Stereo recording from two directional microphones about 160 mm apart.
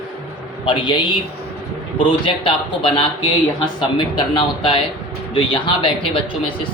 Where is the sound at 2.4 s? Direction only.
30° left (ahead or behind).